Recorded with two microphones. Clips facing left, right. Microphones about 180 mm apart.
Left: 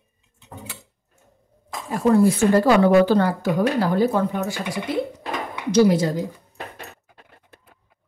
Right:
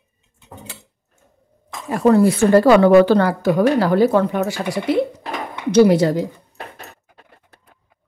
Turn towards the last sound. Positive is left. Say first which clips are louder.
# right 4 dB
turn(degrees=-65)  # may be behind; listen again after turning